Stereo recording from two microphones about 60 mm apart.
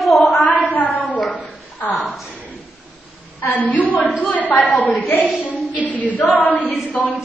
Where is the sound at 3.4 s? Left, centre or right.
Left.